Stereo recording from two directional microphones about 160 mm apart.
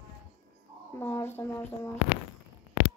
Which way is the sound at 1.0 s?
15° left (ahead or behind).